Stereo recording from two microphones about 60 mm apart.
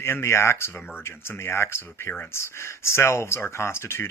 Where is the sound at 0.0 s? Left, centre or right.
Left.